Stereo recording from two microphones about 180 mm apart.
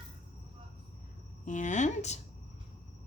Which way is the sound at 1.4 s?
45° left (ahead or behind).